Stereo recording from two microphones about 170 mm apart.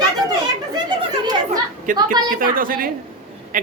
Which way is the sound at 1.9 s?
50° right (ahead or behind).